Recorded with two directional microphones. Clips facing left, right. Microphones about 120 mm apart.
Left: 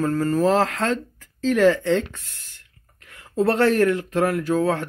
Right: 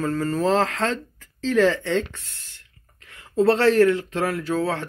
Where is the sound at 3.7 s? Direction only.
15° left (ahead or behind).